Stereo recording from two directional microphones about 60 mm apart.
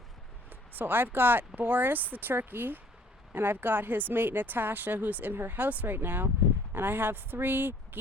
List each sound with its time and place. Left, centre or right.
0.5 s speech: right